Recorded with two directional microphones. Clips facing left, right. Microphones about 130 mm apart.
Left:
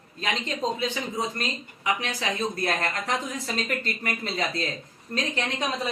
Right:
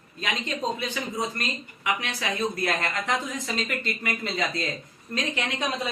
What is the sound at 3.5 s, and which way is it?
A man's voice, 40° left (ahead or behind).